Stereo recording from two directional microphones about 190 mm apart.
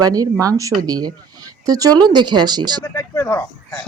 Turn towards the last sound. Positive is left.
turn(degrees=15)  # may be behind; listen again after turning